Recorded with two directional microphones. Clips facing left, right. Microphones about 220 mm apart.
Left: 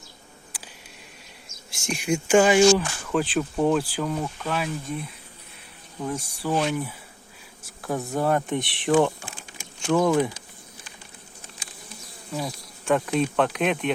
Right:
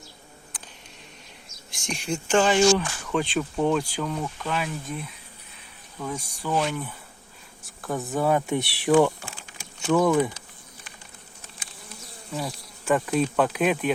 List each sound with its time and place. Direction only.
1.7 s speech: 5° left (ahead or behind)
6.1 s speech: 5° left (ahead or behind)
9.0 s speech: 15° left (ahead or behind)
9.8 s speech: centre (ahead or behind)
12.3 s speech: centre (ahead or behind)